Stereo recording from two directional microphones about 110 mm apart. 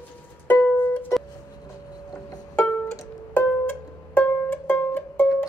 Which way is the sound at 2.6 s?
20° left (ahead or behind).